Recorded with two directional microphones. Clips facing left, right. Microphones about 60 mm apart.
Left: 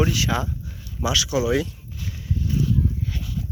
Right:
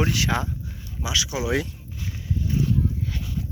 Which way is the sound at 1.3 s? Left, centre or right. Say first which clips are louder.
Left 4 dB; right.